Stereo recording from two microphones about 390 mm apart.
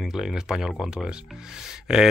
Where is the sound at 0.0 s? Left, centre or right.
Centre.